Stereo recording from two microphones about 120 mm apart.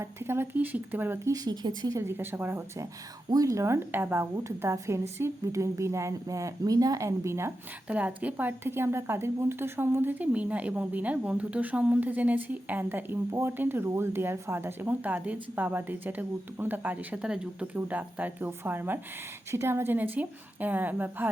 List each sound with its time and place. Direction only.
0.0 s a woman's voice: 20° right (ahead or behind)
1.3 s speech: 35° right (ahead or behind)
2.0 s a woman's voice: 20° right (ahead or behind)
3.2 s a woman's voice: 30° right (ahead or behind)